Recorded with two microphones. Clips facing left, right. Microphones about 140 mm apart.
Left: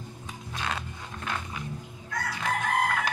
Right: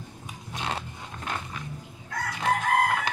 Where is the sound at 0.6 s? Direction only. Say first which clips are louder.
Right 1 dB; 30° right (ahead or behind).